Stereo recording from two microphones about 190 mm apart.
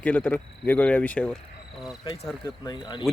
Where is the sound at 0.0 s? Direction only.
5° left (ahead or behind).